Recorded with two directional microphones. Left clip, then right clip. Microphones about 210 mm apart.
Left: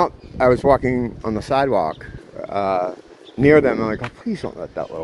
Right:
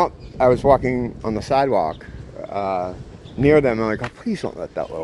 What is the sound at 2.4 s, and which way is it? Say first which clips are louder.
A man's voice: left 3 dB; 20° left (ahead or behind).